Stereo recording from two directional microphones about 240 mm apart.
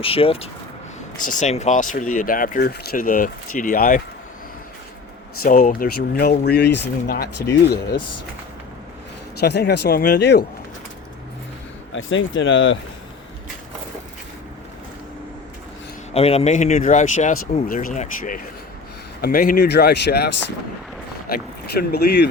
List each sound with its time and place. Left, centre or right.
0.0 s speech: left
5.4 s speech: left
9.4 s speech: left
11.9 s speech: left
16.1 s speech: left
21.8 s speech: left